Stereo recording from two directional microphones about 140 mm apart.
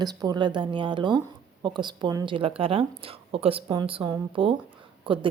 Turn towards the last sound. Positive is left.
turn(degrees=-35)  # may be behind; listen again after turning